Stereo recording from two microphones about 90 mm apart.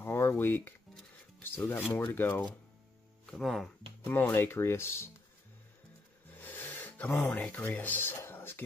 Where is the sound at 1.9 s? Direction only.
25° left (ahead or behind).